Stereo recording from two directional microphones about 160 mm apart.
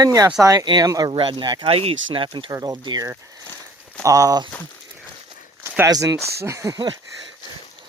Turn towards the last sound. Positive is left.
turn(degrees=-25)  # may be behind; listen again after turning